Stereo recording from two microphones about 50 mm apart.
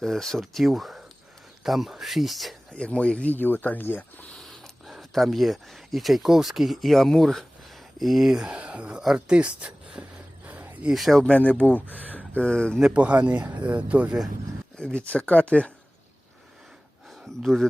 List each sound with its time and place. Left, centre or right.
0.0 s speech: centre
2.7 s speech: left
3.3 s speech: left
4.4 s speech: centre
8.5 s speech: right
10.0 s a sound: right
10.4 s a sound: right
10.9 s speech: centre
11.3 s speech: left
12.4 s speech: centre
12.9 s speech: right
14.9 s speech: left